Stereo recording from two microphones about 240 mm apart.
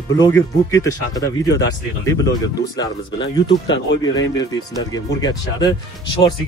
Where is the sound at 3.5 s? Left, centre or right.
Left.